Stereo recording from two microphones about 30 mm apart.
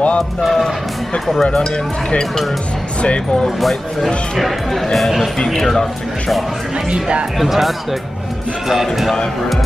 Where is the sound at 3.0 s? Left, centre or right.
Left.